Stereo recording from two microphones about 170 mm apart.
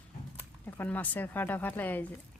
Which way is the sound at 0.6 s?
10° left (ahead or behind).